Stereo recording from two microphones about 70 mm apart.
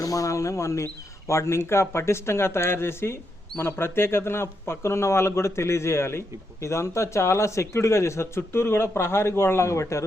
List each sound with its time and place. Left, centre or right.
0.0 s speech: left